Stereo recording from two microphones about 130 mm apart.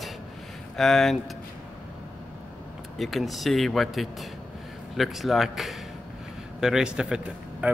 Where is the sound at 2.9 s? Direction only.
Centre (ahead or behind).